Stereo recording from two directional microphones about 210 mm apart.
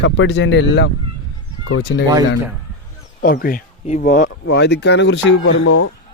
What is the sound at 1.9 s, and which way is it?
Speech, 65° left (ahead or behind).